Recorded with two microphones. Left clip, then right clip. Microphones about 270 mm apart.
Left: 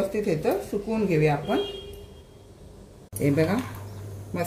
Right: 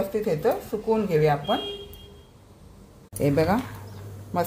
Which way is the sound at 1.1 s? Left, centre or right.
Right.